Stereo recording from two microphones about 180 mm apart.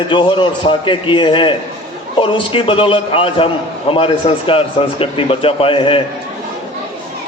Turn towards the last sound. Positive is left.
turn(degrees=30)  # may be behind; listen again after turning